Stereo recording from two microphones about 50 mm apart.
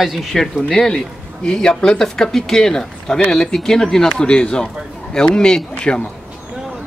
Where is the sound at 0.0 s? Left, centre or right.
Centre.